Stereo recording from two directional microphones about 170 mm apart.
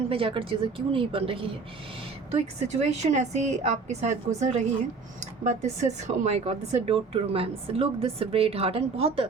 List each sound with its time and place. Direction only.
0.1 s a woman's voice: 30° right (ahead or behind)